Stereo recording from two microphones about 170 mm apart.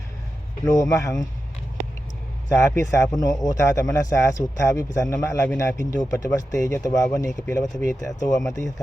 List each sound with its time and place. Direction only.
0.7 s a man's voice: 20° left (ahead or behind)
2.5 s a man's voice: 20° left (ahead or behind)